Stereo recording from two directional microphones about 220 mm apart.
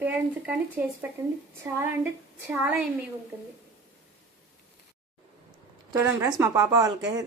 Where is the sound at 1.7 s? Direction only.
10° right (ahead or behind).